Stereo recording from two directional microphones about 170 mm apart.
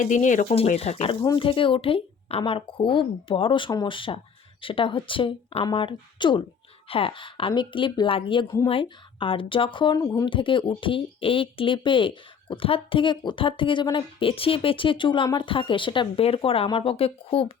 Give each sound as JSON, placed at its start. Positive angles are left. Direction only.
{"t": 0.0, "sound": "speech", "side_deg": 50}
{"t": 1.2, "sound": "a woman's voice", "side_deg": 25}